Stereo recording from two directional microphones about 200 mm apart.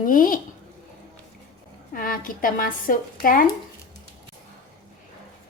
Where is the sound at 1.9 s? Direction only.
45° left (ahead or behind).